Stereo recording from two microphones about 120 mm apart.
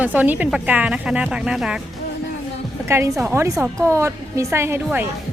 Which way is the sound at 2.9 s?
25° right (ahead or behind).